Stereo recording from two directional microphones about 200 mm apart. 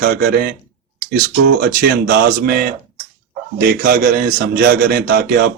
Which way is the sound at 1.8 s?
50° right (ahead or behind).